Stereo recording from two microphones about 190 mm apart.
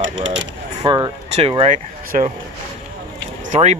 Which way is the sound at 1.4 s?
30° right (ahead or behind).